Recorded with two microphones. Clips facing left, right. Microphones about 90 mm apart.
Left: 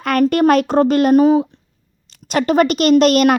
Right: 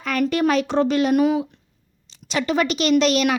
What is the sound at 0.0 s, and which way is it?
A woman's voice, 55° left (ahead or behind).